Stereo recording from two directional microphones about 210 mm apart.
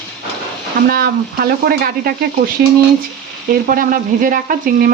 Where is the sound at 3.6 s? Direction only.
40° right (ahead or behind).